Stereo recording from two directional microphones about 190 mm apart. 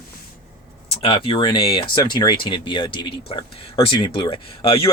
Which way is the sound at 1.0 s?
25° left (ahead or behind).